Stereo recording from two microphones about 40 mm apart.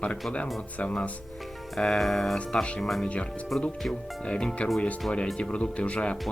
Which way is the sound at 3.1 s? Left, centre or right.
Left.